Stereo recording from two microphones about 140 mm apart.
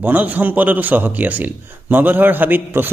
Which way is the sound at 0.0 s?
10° right (ahead or behind).